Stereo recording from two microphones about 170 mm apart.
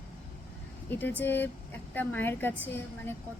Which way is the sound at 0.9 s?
10° left (ahead or behind).